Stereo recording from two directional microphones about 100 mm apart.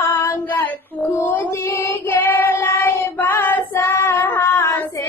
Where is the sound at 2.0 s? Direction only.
20° left (ahead or behind).